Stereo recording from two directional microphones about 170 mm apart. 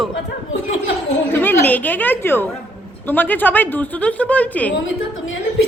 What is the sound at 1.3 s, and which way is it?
A woman's voice, 10° left (ahead or behind).